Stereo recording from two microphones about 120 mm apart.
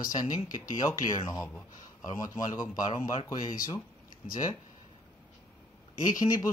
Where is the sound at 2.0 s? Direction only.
30° left (ahead or behind).